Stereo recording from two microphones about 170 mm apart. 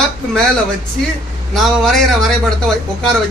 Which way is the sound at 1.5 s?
Centre (ahead or behind).